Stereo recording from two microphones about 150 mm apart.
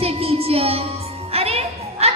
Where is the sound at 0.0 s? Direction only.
40° right (ahead or behind).